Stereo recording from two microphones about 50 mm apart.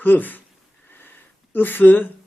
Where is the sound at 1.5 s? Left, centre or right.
Left.